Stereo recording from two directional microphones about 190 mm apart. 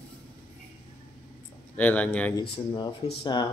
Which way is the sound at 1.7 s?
10° left (ahead or behind).